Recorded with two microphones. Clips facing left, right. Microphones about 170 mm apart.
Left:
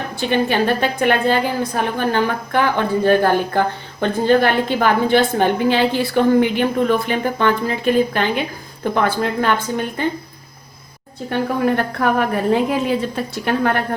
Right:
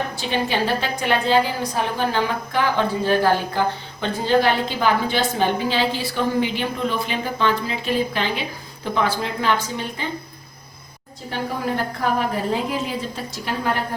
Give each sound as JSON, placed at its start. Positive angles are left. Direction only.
{"t": 0.2, "sound": "a woman's voice", "side_deg": 55}
{"t": 11.3, "sound": "a woman's voice", "side_deg": 60}